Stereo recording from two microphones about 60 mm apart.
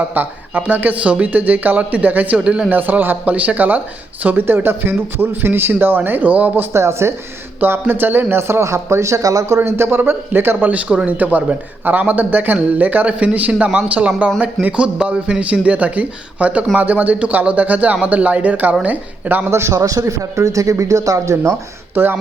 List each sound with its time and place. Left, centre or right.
0.1 s a man's voice: right
2.6 s a man's voice: right
6.7 s speech: right
7.6 s speech: right
9.6 s a man's voice: right
19.5 s speech: right
19.7 s speech: right
21.9 s speech: right